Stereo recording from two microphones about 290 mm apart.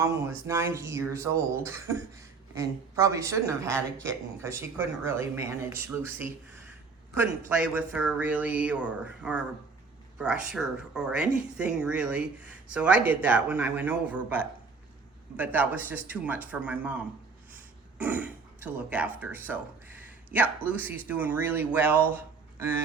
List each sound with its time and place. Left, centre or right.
0.0 s speech: centre